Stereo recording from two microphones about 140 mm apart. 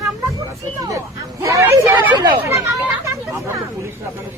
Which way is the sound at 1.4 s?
20° right (ahead or behind).